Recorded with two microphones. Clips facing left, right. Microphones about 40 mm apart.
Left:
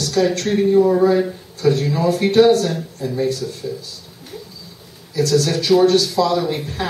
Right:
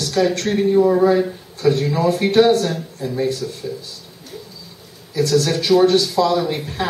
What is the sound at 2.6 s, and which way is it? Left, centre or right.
Speech, centre.